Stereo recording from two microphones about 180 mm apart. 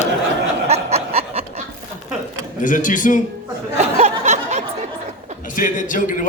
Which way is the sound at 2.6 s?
45° left (ahead or behind).